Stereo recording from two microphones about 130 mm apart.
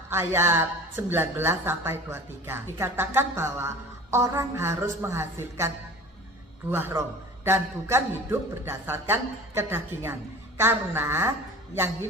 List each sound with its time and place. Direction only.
0.1 s a woman's voice: 20° right (ahead or behind)